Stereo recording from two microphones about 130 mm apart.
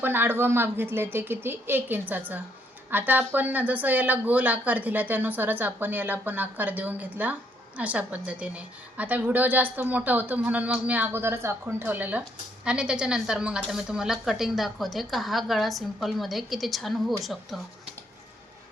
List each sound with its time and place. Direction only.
0.0 s a woman's voice: 15° right (ahead or behind); by 17.7 s centre (ahead or behind)